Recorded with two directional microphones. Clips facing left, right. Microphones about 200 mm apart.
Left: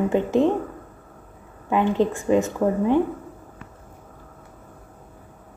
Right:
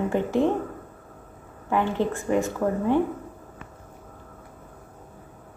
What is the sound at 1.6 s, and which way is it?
A woman's voice, 15° left (ahead or behind).